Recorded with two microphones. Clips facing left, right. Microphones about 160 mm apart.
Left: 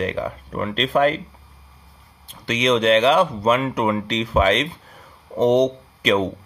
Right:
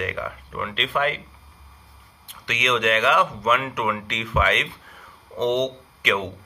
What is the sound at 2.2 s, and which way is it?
Speech, 35° left (ahead or behind).